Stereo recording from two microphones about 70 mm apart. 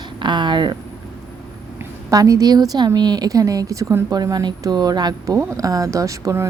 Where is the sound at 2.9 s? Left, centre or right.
Right.